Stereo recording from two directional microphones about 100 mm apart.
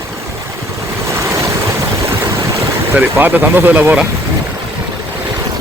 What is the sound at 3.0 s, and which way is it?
Speech, 20° right (ahead or behind).